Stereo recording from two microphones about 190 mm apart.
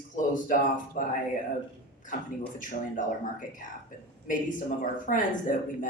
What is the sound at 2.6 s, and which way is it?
A man's voice, 45° left (ahead or behind).